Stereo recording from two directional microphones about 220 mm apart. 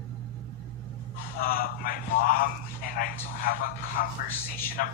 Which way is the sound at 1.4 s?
40° left (ahead or behind).